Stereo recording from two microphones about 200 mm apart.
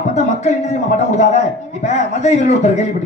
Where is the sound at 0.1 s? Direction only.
35° left (ahead or behind).